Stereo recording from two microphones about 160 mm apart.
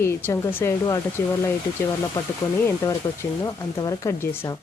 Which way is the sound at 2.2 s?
20° left (ahead or behind).